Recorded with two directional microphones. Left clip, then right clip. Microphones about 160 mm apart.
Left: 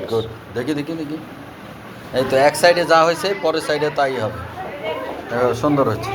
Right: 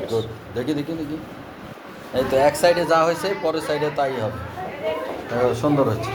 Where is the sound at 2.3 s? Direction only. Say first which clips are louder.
Left 3 dB; 5° right (ahead or behind).